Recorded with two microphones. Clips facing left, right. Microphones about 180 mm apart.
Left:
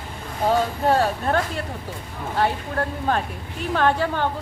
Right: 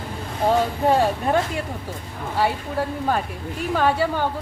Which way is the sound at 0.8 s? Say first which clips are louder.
Right 1 dB; 15° right (ahead or behind).